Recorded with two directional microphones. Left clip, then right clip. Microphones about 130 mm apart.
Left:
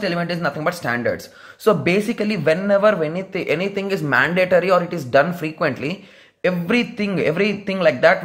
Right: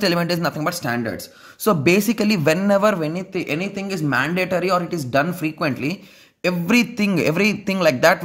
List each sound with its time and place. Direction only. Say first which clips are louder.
0.0 s speech: right 3 dB; 75° right (ahead or behind)
0.4 s a man's voice: left 1 dB; 45° right (ahead or behind)
0.8 s speech: left 3 dB; 25° right (ahead or behind)
1.6 s a man's voice: even; 45° right (ahead or behind)
3.3 s speech: left 5 dB; 20° right (ahead or behind)
6.4 s a man's voice: even; 50° right (ahead or behind)